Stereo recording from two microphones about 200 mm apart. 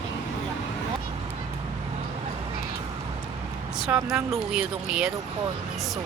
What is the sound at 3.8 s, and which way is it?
Speech, 5° right (ahead or behind).